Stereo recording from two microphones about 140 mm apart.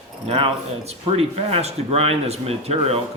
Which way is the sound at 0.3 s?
45° right (ahead or behind).